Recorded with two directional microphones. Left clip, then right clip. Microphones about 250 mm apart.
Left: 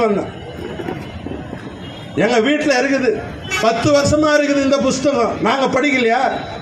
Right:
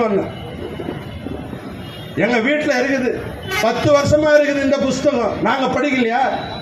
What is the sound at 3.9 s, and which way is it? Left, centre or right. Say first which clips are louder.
A man's voice: right 4 dB; left.